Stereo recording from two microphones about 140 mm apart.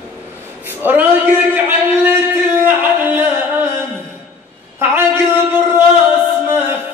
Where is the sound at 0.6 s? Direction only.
15° right (ahead or behind).